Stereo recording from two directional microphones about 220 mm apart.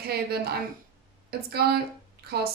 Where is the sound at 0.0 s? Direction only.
45° right (ahead or behind).